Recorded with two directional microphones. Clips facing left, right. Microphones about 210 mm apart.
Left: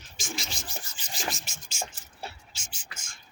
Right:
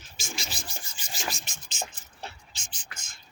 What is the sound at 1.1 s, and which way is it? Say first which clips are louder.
Sanding: left 1 dB; centre (ahead or behind).